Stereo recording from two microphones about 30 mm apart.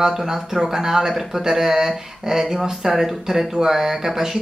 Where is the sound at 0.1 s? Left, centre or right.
Centre.